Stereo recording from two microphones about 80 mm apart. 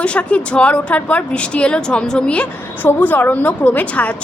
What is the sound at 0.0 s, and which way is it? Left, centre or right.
A woman's voice, centre.